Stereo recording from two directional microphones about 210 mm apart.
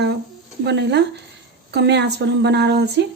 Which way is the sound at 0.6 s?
55° right (ahead or behind).